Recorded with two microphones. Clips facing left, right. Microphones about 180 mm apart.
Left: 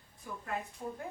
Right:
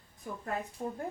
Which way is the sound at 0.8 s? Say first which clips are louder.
Right 4 dB; 30° right (ahead or behind).